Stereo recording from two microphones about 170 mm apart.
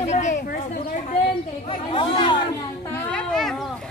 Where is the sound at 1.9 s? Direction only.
30° left (ahead or behind).